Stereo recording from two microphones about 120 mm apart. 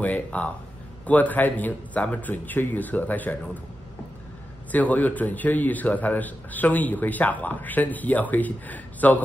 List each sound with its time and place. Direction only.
0.0 s a man's voice: 10° left (ahead or behind)
4.7 s a man's voice: 15° left (ahead or behind)